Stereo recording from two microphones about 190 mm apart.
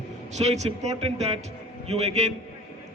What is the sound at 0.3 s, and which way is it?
A man's voice, 35° right (ahead or behind).